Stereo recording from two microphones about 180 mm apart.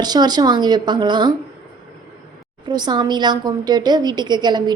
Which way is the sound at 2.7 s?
25° right (ahead or behind).